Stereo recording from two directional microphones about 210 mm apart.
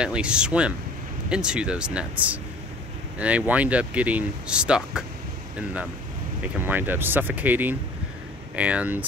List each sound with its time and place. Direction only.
0.0 s speech: 5° right (ahead or behind)
6.4 s speech: 10° right (ahead or behind)